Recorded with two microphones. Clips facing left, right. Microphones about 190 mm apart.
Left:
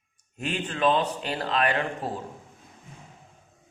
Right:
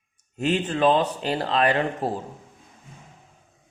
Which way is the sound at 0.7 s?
35° right (ahead or behind).